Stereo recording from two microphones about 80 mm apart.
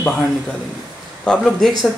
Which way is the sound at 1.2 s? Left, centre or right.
Centre.